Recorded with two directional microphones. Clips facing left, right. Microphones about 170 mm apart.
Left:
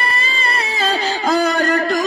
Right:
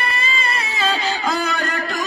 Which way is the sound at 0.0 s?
35° left (ahead or behind).